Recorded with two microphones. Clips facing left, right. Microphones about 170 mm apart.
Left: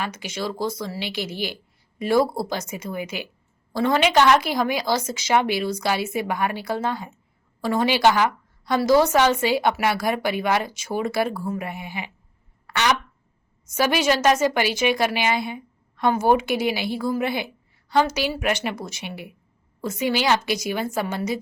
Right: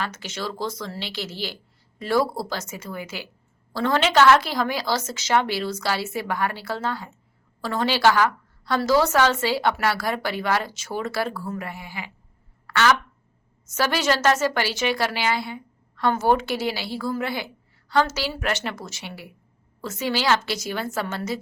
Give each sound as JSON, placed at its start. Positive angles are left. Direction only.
{"t": 0.0, "sound": "a woman's voice", "side_deg": 10}
{"t": 12.6, "sound": "a sound", "side_deg": 20}
{"t": 13.7, "sound": "a woman's voice", "side_deg": 15}